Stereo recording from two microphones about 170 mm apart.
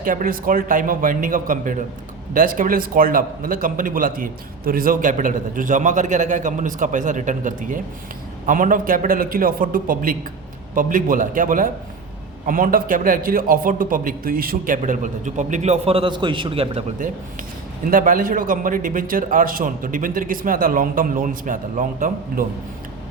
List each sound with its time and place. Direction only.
0.0 s a man's voice: 55° right (ahead or behind)
14.8 s a man's voice: 50° right (ahead or behind)
17.9 s a man's voice: 55° right (ahead or behind)